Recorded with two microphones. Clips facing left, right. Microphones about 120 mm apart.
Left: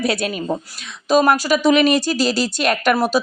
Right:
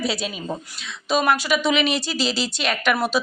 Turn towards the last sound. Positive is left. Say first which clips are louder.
# left 4 dB
turn(degrees=40)  # may be behind; listen again after turning